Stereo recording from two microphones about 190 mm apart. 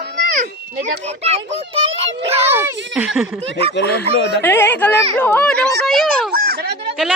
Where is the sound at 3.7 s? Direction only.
60° left (ahead or behind).